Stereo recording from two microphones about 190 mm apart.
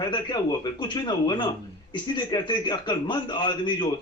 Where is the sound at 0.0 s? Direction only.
20° left (ahead or behind).